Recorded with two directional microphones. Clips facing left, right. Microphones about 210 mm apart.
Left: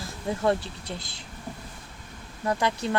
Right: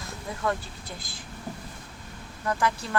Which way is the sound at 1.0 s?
70° left (ahead or behind).